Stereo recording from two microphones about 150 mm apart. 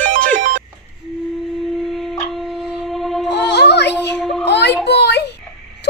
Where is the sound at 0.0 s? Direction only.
10° left (ahead or behind).